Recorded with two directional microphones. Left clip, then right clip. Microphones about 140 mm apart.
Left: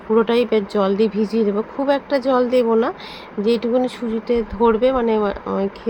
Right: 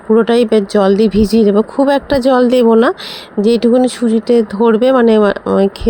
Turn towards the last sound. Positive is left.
turn(degrees=-60)  # may be behind; listen again after turning